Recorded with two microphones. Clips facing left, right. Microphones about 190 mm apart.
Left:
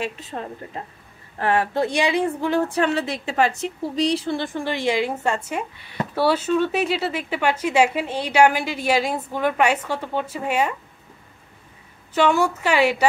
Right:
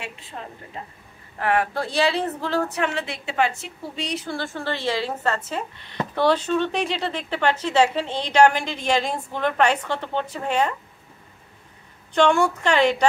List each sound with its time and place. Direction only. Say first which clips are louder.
0.0 s a woman's voice: left 8 dB; 40° left (ahead or behind)
1.4 s speech: left 2 dB; 30° left (ahead or behind)
2.7 s a woman's voice: left 5 dB; 35° left (ahead or behind)
4.4 s speech: left 3 dB; 15° left (ahead or behind)
12.1 s speech: even; 5° left (ahead or behind)